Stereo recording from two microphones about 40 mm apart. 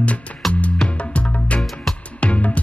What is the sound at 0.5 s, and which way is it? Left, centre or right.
Music, left.